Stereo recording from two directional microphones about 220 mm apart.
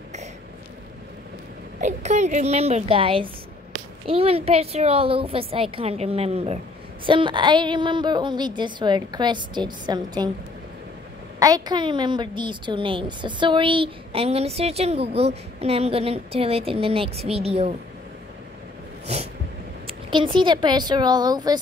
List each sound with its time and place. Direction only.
1.8 s a woman's voice: 30° right (ahead or behind)
11.3 s a woman's voice: 15° right (ahead or behind)
19.9 s a woman's voice: 20° right (ahead or behind)